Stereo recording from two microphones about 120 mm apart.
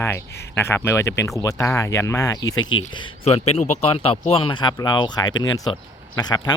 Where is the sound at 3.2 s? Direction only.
60° left (ahead or behind).